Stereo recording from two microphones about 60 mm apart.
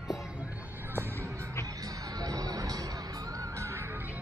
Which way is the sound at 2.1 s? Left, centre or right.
Right.